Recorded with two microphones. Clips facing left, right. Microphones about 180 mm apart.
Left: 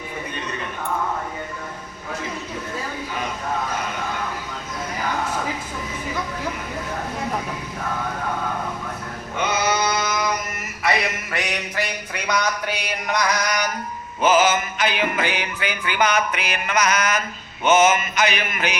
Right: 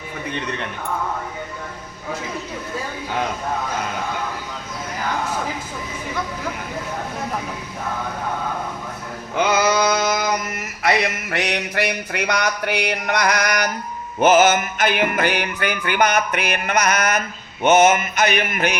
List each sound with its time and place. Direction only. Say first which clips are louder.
9.3 s sheep: right 5 dB; 90° right
10.8 s music: right 3 dB; 70° right (ahead or behind)
14.2 s music: right 3 dB; 50° right (ahead or behind)